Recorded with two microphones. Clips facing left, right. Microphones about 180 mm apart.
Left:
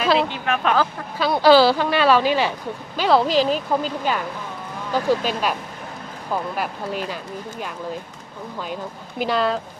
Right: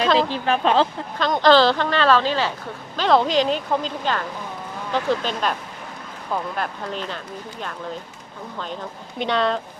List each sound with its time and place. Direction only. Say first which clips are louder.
0.3 s speech: right 2 dB; 30° right (ahead or behind)
1.2 s a woman's voice: left 2 dB; 10° left (ahead or behind)
6.6 s speech: left 2 dB; 10° left (ahead or behind)
8.5 s a woman's voice: left 1 dB; 10° left (ahead or behind)